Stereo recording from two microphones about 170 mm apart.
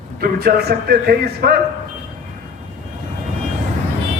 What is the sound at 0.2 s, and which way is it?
A man's voice, 65° right (ahead or behind).